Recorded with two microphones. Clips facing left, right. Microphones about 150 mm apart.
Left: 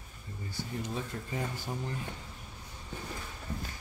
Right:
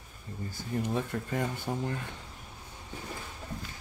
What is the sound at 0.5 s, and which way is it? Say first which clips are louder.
Speech: right 5 dB; 60° right (ahead or behind).